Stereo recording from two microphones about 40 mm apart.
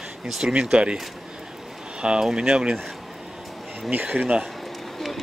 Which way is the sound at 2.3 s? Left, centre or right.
Right.